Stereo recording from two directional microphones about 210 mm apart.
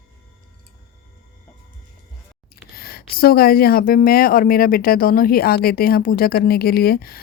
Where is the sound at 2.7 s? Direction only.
45° left (ahead or behind).